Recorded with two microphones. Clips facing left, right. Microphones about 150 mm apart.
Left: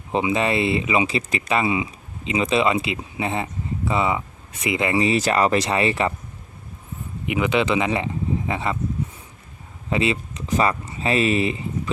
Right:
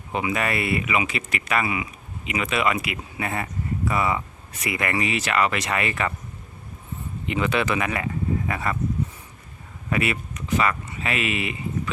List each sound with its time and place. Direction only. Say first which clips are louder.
0.1 s speech: left 4 dB; 25° left (ahead or behind)
5.1 s speech: left 5 dB; 35° left (ahead or behind)
7.3 s speech: left 3 dB; 15° left (ahead or behind)
9.9 s speech: left 3 dB; 25° left (ahead or behind)